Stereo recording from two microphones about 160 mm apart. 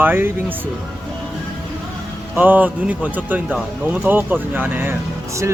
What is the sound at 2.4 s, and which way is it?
Speech, 10° right (ahead or behind).